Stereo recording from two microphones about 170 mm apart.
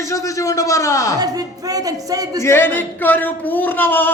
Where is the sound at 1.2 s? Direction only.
20° right (ahead or behind).